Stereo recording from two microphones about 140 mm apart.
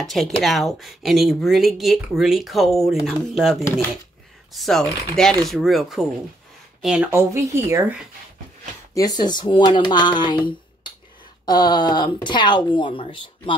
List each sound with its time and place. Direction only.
0.0 s speech: centre (ahead or behind)
4.6 s speech: centre (ahead or behind)
7.1 s speech: 20° right (ahead or behind)
8.9 s speech: 30° left (ahead or behind)